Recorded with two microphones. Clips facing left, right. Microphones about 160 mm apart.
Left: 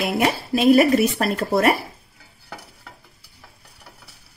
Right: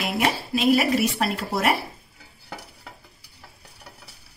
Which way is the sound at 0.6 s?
50° left (ahead or behind).